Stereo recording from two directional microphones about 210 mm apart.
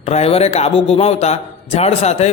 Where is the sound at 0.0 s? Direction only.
30° left (ahead or behind).